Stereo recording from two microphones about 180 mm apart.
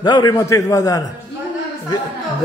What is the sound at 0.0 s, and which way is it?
A man's voice, 25° left (ahead or behind).